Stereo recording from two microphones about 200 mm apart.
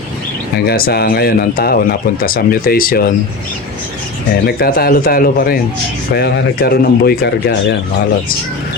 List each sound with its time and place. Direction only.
0.5 s speech: 50° left (ahead or behind)
4.4 s speech: 50° left (ahead or behind)